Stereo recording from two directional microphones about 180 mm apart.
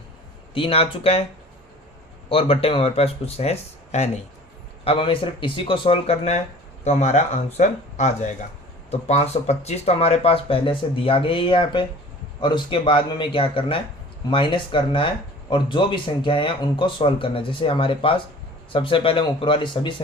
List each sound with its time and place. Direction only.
0.5 s speech: 30° left (ahead or behind)
2.3 s speech: 30° left (ahead or behind)